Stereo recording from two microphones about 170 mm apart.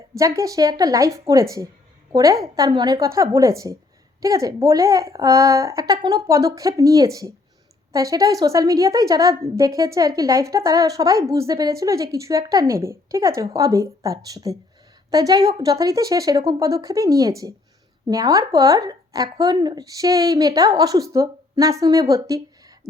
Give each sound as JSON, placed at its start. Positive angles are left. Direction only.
{"t": 0.1, "sound": "a woman's voice", "side_deg": -20}